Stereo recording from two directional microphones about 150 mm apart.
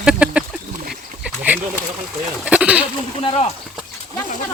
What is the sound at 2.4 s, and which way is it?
Speech, 10° right (ahead or behind).